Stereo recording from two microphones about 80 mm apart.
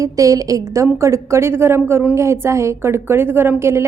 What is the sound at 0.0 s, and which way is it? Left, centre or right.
A woman's voice, right.